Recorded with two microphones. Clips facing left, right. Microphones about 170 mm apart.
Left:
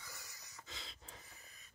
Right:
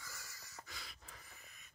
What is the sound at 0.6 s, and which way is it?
Pant, 20° left (ahead or behind).